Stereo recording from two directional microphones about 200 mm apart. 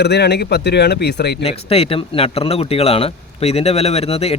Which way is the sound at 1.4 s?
30° left (ahead or behind).